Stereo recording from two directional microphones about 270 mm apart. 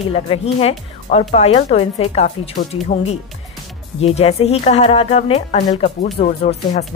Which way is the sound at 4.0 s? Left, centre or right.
Left.